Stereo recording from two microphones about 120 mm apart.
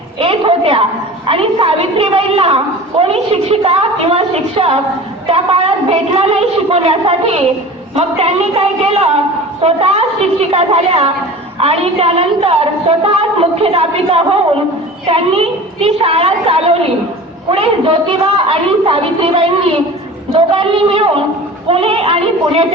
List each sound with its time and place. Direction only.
0.2 s a sound: 50° right (ahead or behind)
1.3 s a woman's voice: 50° right (ahead or behind)
7.9 s a woman's voice: 60° right (ahead or behind)